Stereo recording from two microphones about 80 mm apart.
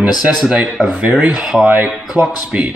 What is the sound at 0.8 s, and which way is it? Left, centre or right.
Speech, centre.